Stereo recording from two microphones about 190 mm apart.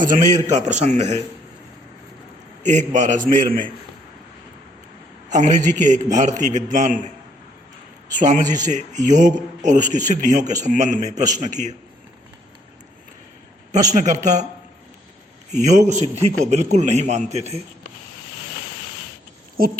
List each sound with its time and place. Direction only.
0.0 s a man's voice: 40° right (ahead or behind)
2.6 s a man's voice: 40° right (ahead or behind)
5.3 s a man's voice: 40° right (ahead or behind)
8.2 s a man's voice: 40° right (ahead or behind)
13.7 s a man's voice: 40° right (ahead or behind)
15.5 s a man's voice: 40° right (ahead or behind)
19.5 s speech: 50° right (ahead or behind)